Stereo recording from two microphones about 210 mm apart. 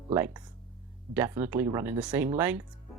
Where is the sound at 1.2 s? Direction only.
10° right (ahead or behind).